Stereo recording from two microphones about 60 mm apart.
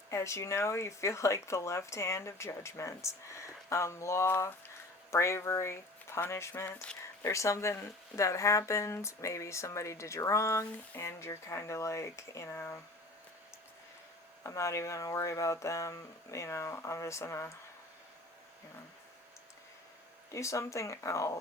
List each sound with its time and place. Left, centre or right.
0.1 s speech: left
12.5 s speech: left
14.4 s speech: left
20.3 s speech: left